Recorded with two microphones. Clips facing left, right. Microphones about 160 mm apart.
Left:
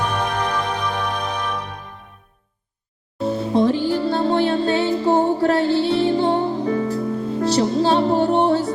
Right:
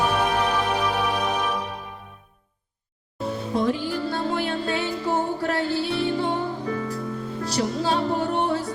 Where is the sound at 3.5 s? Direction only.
30° left (ahead or behind).